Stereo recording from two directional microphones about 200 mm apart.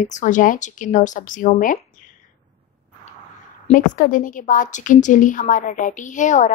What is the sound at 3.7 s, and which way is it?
A woman's voice, 40° left (ahead or behind).